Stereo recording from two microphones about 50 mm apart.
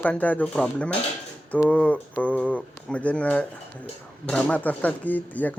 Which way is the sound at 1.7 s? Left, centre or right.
Left.